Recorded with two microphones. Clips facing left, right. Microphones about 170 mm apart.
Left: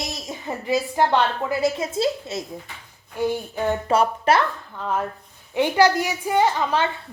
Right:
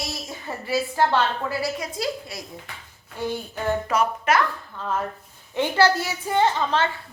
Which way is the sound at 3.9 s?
30° left (ahead or behind).